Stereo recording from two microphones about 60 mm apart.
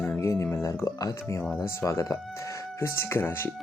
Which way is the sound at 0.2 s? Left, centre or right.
Left.